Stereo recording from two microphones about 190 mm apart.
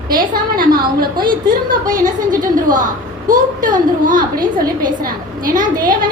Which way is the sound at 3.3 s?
45° right (ahead or behind).